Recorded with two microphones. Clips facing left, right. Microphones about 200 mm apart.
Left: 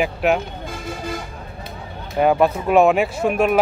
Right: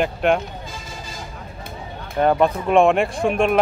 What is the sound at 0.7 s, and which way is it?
Vehicle, 60° left (ahead or behind).